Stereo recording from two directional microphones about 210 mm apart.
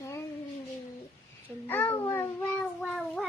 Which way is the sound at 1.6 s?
10° left (ahead or behind).